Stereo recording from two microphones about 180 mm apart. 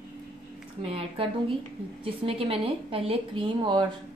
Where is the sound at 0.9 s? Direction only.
30° right (ahead or behind).